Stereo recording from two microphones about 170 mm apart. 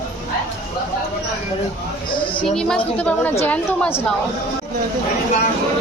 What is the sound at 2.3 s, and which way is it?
A woman's voice, 5° left (ahead or behind).